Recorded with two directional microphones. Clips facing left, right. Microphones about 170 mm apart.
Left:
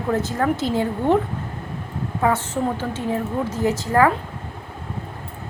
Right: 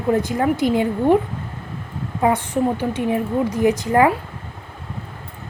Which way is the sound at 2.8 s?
15° right (ahead or behind).